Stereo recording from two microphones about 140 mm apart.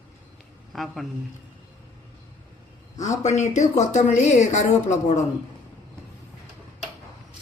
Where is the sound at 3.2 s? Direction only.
55° left (ahead or behind).